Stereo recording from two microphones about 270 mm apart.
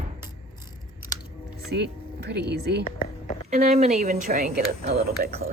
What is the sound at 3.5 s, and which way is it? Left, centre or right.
Speech, right.